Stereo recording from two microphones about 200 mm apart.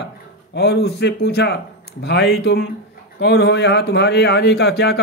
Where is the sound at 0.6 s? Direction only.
55° left (ahead or behind).